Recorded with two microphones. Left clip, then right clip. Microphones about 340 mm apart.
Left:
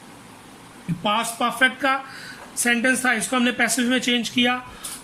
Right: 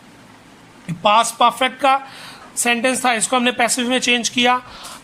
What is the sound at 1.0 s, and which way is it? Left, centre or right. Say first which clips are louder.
Speech: right 9 dB; centre.